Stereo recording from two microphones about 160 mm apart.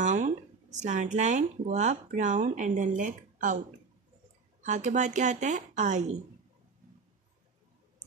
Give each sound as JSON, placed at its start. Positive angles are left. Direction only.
{"t": 0.0, "sound": "speech", "side_deg": -50}
{"t": 4.6, "sound": "a woman's voice", "side_deg": -50}